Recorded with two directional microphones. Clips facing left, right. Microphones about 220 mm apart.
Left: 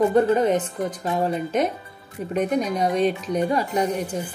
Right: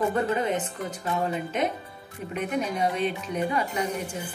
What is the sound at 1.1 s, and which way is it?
A woman's voice, 45° left (ahead or behind).